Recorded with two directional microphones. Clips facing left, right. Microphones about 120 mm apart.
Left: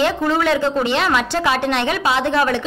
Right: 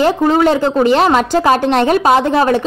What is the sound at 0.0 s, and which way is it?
Speech, 40° right (ahead or behind).